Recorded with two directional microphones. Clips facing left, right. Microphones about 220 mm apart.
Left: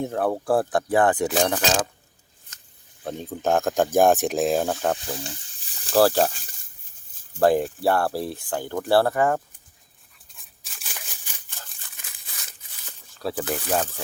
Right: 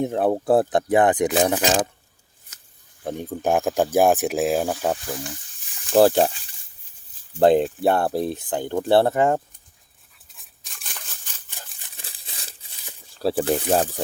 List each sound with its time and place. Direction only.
0.0 s speech: 20° right (ahead or behind)
3.0 s speech: 15° right (ahead or behind)
4.9 s speech: 25° left (ahead or behind)
5.9 s speech: 15° right (ahead or behind)
7.3 s speech: 25° right (ahead or behind)
10.3 s tearing: centre (ahead or behind)
11.3 s a sound: 10° left (ahead or behind)
11.9 s crumpling: 30° right (ahead or behind)
13.1 s speech: 30° right (ahead or behind)